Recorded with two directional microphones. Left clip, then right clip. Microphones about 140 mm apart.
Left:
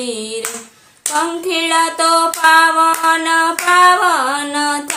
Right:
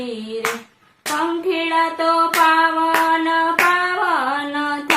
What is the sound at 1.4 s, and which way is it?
Music, 40° left (ahead or behind).